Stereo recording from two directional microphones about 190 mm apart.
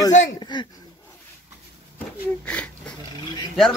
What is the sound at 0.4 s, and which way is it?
Speech, 25° left (ahead or behind).